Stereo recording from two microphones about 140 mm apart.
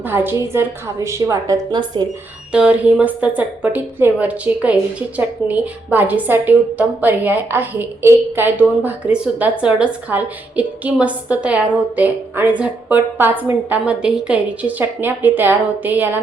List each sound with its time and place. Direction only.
0.0 s a woman's voice: 15° right (ahead or behind)
2.5 s a woman's voice: 10° right (ahead or behind)